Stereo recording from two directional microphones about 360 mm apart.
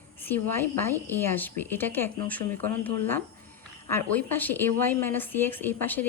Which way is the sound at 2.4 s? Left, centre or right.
Right.